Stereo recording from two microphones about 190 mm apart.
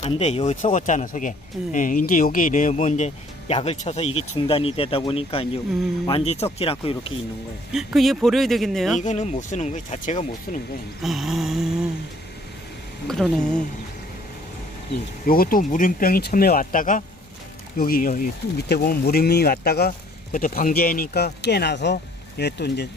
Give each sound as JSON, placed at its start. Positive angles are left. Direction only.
{"t": 0.0, "sound": "speech", "side_deg": 35}
{"t": 7.7, "sound": "speech", "side_deg": 0}
{"t": 9.0, "sound": "speech", "side_deg": 40}
{"t": 11.0, "sound": "speech", "side_deg": 0}
{"t": 13.1, "sound": "speech", "side_deg": 0}
{"t": 15.3, "sound": "speech", "side_deg": 50}